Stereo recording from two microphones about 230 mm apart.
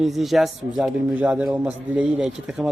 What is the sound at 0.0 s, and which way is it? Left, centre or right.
A man's voice, centre.